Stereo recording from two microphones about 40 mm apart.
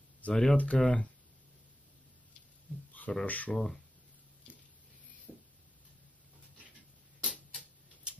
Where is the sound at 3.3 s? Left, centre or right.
Left.